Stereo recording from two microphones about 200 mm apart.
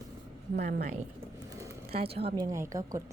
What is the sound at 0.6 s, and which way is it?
Speech, 40° right (ahead or behind).